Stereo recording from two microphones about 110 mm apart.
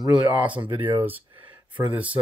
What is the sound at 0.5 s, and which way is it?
Speech, 50° right (ahead or behind).